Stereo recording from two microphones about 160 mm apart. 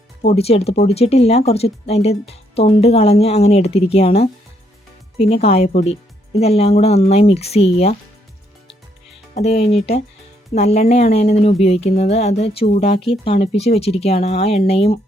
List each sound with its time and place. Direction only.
0.3 s speech: 40° left (ahead or behind)
9.3 s speech: 40° left (ahead or behind)